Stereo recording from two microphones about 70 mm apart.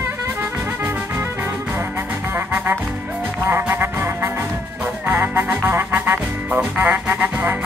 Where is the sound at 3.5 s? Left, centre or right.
Right.